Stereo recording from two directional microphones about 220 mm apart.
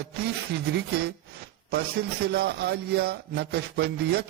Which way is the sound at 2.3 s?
50° right (ahead or behind).